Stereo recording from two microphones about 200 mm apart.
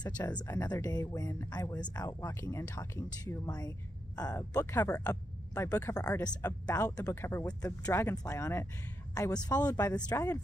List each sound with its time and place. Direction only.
0.5 s speech: 15° left (ahead or behind)